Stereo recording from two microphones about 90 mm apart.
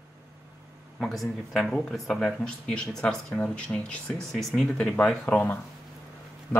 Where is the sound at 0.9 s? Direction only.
Centre (ahead or behind).